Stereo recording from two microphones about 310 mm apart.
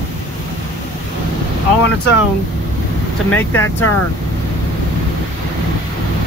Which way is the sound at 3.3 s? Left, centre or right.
Centre.